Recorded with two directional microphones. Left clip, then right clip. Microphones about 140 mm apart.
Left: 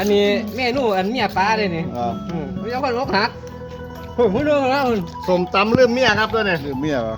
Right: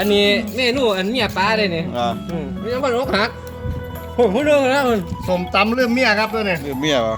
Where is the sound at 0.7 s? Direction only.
30° left (ahead or behind).